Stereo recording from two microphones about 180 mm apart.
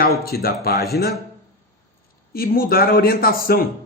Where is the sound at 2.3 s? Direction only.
55° left (ahead or behind).